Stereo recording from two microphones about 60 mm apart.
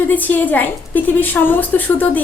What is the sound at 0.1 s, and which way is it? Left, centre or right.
A woman's voice, left.